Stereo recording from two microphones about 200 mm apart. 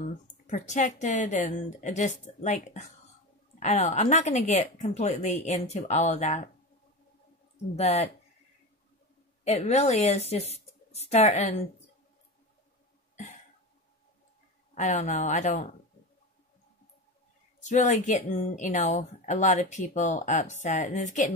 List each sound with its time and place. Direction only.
0.0 s a woman's voice: 40° left (ahead or behind)
7.7 s a woman's voice: 30° left (ahead or behind)
9.4 s a woman's voice: 35° left (ahead or behind)
13.1 s cough: 40° left (ahead or behind)
14.7 s a woman's voice: 40° left (ahead or behind)
17.6 s a woman's voice: 35° left (ahead or behind)